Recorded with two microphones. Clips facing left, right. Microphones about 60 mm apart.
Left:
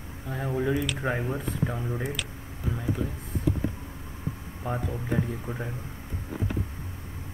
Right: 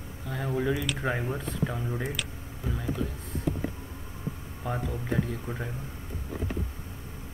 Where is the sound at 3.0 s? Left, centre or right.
Left.